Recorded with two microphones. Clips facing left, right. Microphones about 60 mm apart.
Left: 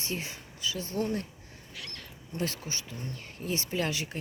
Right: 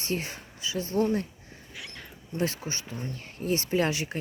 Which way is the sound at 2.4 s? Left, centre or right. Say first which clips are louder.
Right 4 dB; right.